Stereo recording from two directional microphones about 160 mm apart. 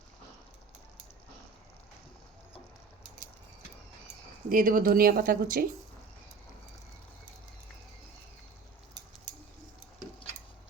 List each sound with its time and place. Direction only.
4.4 s speech: 55° right (ahead or behind)